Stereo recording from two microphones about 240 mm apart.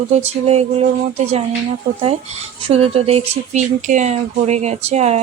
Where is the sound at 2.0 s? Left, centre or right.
Right.